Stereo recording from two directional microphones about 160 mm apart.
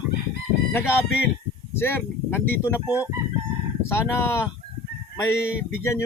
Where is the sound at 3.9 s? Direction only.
15° left (ahead or behind).